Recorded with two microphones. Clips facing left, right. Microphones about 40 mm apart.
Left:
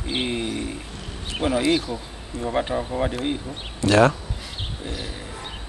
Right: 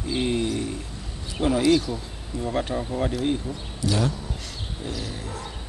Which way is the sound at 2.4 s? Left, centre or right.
Centre.